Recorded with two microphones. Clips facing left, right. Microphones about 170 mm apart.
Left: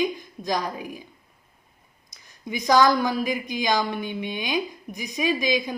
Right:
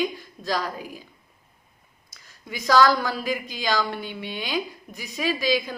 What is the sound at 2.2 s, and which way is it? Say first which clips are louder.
A woman's voice: left 5 dB; 20° left (ahead or behind).